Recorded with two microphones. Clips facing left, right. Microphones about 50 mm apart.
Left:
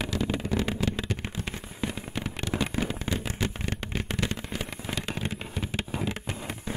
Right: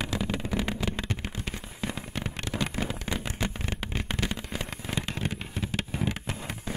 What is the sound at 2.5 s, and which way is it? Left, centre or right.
Fireworks, centre.